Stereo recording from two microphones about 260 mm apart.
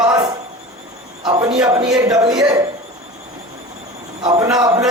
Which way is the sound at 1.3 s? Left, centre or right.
Centre.